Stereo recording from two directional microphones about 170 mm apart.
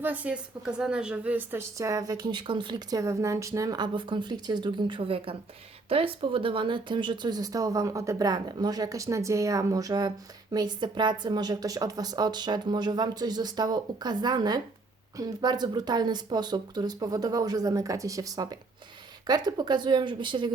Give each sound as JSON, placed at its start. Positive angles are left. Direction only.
{"t": 0.0, "sound": "a woman's voice", "side_deg": -10}